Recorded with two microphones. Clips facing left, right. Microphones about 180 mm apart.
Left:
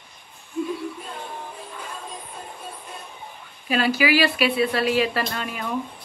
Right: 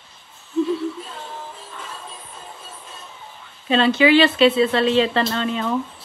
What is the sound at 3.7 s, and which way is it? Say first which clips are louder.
Speech: right 5 dB; 25° right (ahead or behind).